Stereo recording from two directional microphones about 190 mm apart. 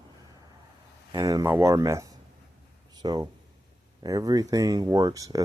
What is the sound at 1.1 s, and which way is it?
Speech, 20° right (ahead or behind).